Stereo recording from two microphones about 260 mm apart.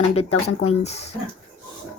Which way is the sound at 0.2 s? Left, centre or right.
Left.